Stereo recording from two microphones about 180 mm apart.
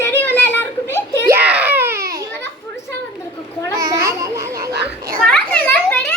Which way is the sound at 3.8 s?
20° right (ahead or behind).